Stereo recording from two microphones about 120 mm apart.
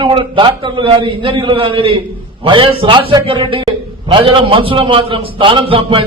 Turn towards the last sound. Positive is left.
turn(degrees=-45)  # may be behind; listen again after turning